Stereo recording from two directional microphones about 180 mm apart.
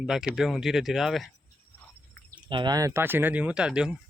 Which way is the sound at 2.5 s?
25° right (ahead or behind).